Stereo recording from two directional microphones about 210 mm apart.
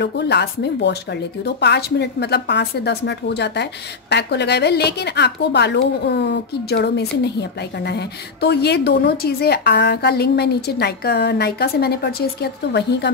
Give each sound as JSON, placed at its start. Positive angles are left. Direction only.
{"t": 0.0, "sound": "a woman's voice", "side_deg": 55}